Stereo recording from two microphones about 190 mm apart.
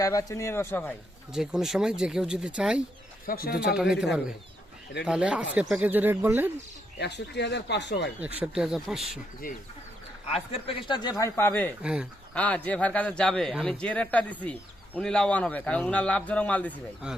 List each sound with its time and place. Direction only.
0.0 s speech: 15° left (ahead or behind)
1.3 s speech: centre (ahead or behind)
3.2 s speech: 50° left (ahead or behind)
3.8 s speech: 5° right (ahead or behind)
5.0 s speech: 5° right (ahead or behind)
7.0 s speech: 60° left (ahead or behind)
8.4 s speech: 5° right (ahead or behind)
10.3 s speech: 30° left (ahead or behind); by 11.7 s 10° left (ahead or behind)
11.8 s speech: 5° right (ahead or behind)
12.3 s speech: 5° left (ahead or behind)